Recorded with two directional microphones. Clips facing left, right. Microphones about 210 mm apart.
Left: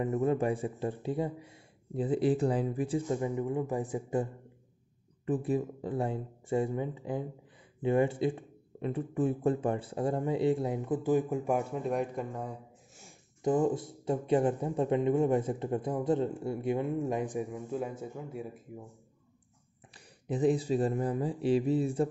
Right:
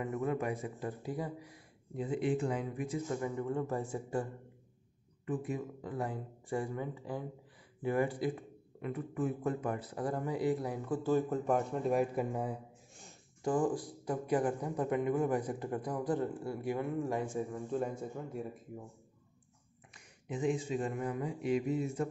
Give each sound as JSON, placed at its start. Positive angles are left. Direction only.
{"t": 0.0, "sound": "speech", "side_deg": 30}
{"t": 5.2, "sound": "speech", "side_deg": 30}
{"t": 13.4, "sound": "speech", "side_deg": 20}
{"t": 20.2, "sound": "speech", "side_deg": 35}